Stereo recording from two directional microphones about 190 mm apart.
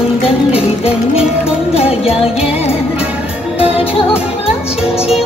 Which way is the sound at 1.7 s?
30° left (ahead or behind).